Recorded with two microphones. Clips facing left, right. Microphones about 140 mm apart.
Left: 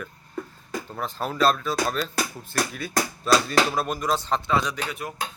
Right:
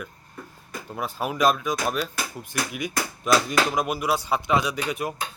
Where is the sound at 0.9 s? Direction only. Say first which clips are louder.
Even; 10° right (ahead or behind).